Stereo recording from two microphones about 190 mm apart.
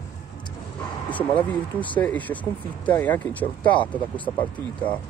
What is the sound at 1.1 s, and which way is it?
Speech, 10° left (ahead or behind).